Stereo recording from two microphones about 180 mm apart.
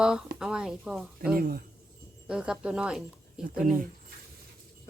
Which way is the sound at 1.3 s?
55° right (ahead or behind).